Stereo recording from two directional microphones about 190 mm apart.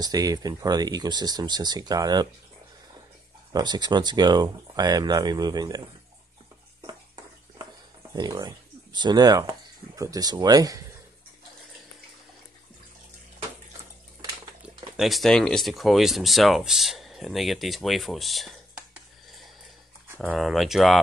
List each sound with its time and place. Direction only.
0.0 s speech: 20° right (ahead or behind)
3.5 s speech: 20° right (ahead or behind)
8.1 s speech: 20° right (ahead or behind)
14.6 s speech: centre (ahead or behind)
20.2 s speech: centre (ahead or behind)